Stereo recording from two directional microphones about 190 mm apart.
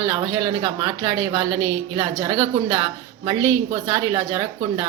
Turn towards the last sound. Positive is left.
turn(degrees=-25)  # may be behind; listen again after turning